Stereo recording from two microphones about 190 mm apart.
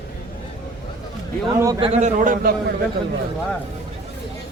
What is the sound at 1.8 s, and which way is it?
Speech, 35° right (ahead or behind).